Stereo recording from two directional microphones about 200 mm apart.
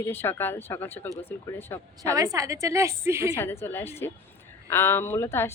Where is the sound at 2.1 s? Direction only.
15° right (ahead or behind).